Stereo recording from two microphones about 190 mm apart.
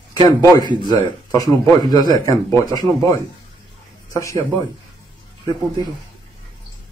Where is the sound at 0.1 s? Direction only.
20° left (ahead or behind).